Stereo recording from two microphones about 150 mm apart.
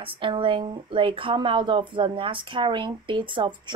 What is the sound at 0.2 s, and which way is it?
Speech, 35° right (ahead or behind).